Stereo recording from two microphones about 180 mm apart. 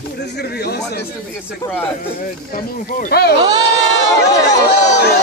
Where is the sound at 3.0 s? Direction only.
60° left (ahead or behind).